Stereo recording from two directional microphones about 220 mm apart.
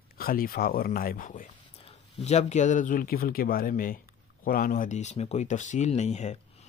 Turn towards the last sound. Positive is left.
turn(degrees=30)  # may be behind; listen again after turning